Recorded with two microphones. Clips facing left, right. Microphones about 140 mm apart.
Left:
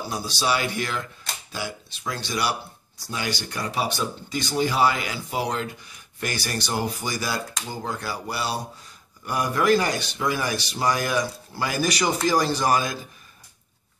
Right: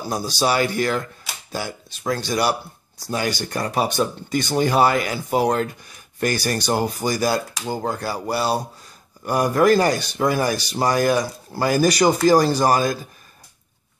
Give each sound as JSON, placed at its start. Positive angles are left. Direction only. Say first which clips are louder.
{"t": 0.1, "sound": "speech", "louder": "right 5 dB", "side_deg": -45}